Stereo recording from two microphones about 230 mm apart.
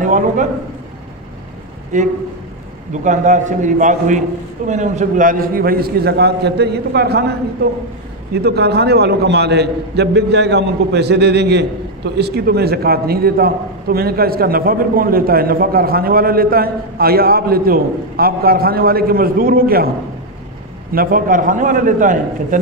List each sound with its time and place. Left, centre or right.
0.0 s a man's voice: right
1.9 s a man's voice: right
8.4 s a man's voice: right
20.9 s a man's voice: right